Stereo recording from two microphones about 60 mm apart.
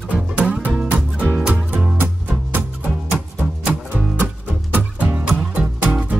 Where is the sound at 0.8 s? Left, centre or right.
Right.